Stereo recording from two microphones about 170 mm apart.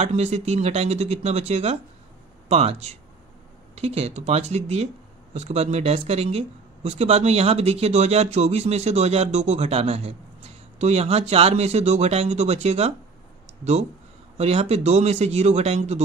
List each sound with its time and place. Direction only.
0.0 s speech: 40° right (ahead or behind)
14.4 s speech: 40° right (ahead or behind)